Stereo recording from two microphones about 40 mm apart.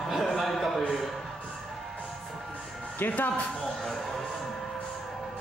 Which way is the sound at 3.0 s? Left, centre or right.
Left.